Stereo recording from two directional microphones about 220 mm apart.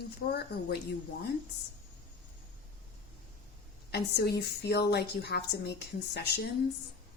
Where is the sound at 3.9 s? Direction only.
45° left (ahead or behind).